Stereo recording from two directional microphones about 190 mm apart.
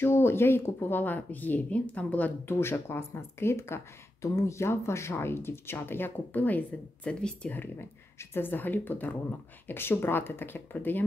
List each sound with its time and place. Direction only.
0.0 s speech: 10° left (ahead or behind)